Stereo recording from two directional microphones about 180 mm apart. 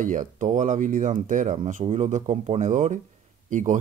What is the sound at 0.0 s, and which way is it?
Speech, 45° right (ahead or behind).